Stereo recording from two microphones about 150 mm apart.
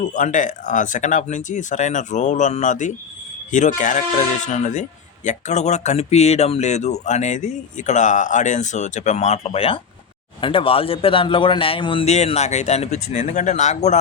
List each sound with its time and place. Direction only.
0.1 s a man's voice: 55° left (ahead or behind)